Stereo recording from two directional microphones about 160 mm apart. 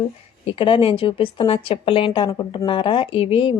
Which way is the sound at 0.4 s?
35° left (ahead or behind).